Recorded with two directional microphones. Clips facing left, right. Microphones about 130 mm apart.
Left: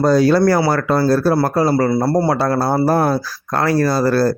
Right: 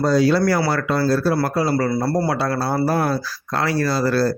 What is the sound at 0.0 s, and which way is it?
Speech, 50° left (ahead or behind).